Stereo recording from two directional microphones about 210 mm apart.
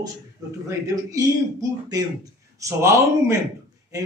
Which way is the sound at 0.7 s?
15° right (ahead or behind).